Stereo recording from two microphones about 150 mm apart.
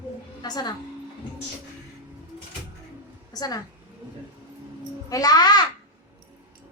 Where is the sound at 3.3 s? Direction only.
25° left (ahead or behind).